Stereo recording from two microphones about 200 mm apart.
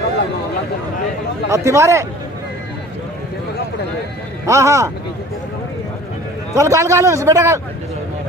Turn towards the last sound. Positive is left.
turn(degrees=-15)  # may be behind; listen again after turning